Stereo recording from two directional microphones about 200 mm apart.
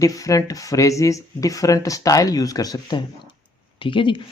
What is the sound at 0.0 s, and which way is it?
Speech, 15° left (ahead or behind).